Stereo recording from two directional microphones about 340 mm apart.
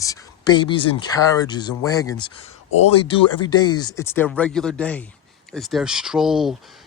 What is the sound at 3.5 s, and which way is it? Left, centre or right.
Speech, left.